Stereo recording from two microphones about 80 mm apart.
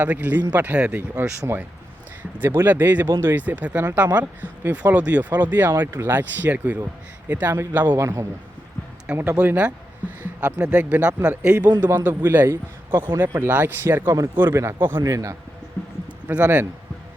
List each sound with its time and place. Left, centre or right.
0.0 s speech: right
1.1 s speech: right
9.1 s a man's voice: right
15.0 s a man's voice: right
15.8 s a sound: left
16.2 s speech: centre